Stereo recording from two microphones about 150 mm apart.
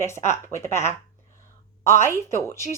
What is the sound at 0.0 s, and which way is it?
Speech, 15° left (ahead or behind).